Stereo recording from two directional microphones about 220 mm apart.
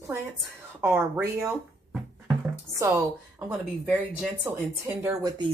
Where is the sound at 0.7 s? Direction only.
10° right (ahead or behind).